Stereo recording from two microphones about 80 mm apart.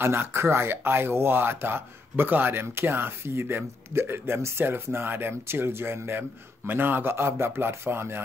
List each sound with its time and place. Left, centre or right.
0.0 s speech: right